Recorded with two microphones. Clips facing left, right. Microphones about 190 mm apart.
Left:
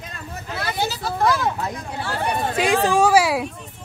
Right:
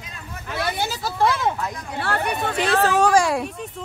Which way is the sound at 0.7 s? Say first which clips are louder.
Left 2 dB; 50° right (ahead or behind).